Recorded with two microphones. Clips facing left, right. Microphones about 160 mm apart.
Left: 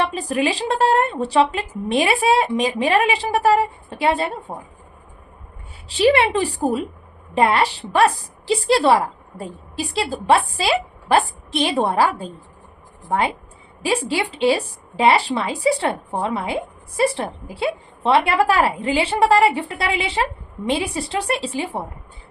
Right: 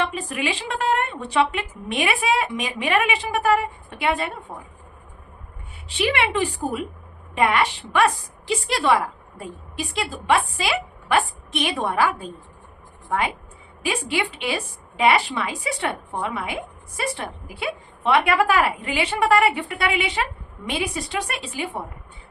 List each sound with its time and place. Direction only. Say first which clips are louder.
0.0 s a woman's voice: left 5 dB; 35° left (ahead or behind)
5.9 s a woman's voice: left 7 dB; 35° left (ahead or behind)